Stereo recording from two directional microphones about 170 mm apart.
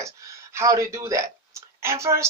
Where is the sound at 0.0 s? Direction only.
15° right (ahead or behind).